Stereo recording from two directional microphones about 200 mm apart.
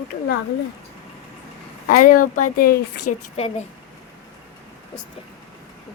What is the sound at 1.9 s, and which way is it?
A woman's voice, 45° left (ahead or behind).